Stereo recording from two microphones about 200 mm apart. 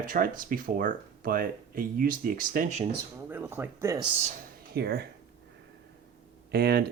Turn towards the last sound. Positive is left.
turn(degrees=-55)  # may be behind; listen again after turning